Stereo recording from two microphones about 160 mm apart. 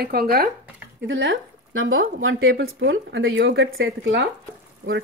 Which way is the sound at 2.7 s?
90° right.